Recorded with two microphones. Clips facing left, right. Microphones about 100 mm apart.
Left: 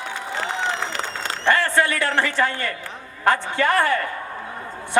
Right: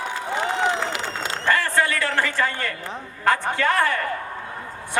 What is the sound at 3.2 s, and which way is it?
Speech, 20° left (ahead or behind).